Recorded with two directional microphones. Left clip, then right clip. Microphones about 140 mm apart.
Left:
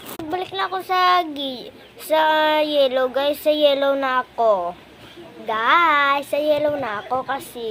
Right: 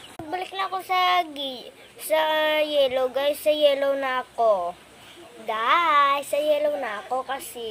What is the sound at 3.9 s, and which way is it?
Speech, 5° right (ahead or behind).